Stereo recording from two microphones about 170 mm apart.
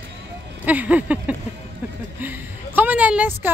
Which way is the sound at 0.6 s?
10° right (ahead or behind).